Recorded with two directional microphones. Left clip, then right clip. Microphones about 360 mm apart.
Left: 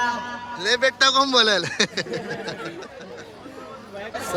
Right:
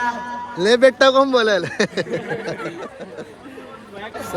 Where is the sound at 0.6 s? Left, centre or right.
Centre.